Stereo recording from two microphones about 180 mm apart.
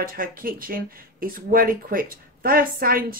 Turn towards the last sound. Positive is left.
turn(degrees=-55)  # may be behind; listen again after turning